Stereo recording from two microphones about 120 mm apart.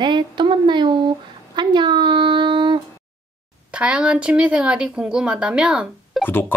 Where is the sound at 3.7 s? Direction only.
10° right (ahead or behind).